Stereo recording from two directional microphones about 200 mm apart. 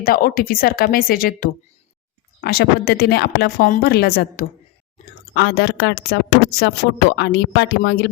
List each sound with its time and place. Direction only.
0.0 s a woman's voice: 45° left (ahead or behind)